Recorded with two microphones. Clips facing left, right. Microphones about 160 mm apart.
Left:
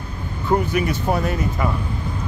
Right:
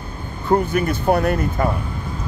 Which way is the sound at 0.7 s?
55° right (ahead or behind).